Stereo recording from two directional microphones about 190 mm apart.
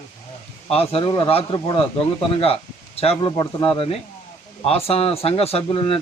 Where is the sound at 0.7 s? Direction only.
30° left (ahead or behind).